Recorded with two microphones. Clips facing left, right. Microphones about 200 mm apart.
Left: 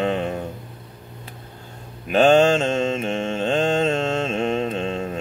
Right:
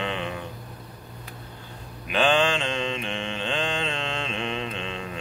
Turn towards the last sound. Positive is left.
turn(degrees=45)  # may be behind; listen again after turning